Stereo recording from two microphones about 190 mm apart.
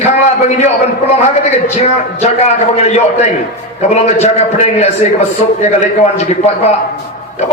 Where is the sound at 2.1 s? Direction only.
35° left (ahead or behind).